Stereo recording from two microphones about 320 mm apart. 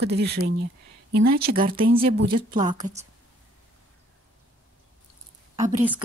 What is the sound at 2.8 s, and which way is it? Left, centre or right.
Speech, centre.